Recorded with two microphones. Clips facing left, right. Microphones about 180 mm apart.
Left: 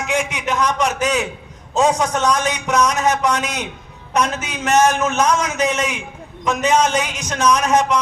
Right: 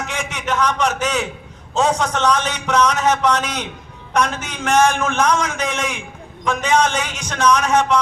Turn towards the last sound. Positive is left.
turn(degrees=10)  # may be behind; listen again after turning